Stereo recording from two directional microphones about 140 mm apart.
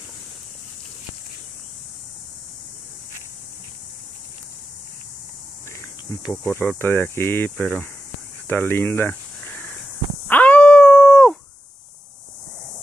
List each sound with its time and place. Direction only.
5.7 s cricket: 20° left (ahead or behind)
6.5 s speech: 15° left (ahead or behind)
8.5 s a sound: 15° left (ahead or behind)
10.2 s dog: 10° left (ahead or behind)